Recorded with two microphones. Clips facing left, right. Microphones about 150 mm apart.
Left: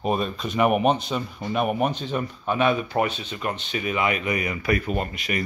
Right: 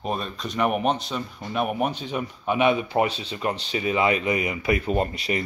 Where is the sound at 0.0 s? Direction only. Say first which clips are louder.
Left 4 dB; 5° left (ahead or behind).